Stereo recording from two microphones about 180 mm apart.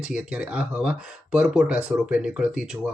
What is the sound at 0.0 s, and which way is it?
Speech, 5° right (ahead or behind).